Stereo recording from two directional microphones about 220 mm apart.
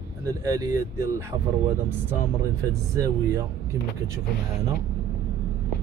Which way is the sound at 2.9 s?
15° right (ahead or behind).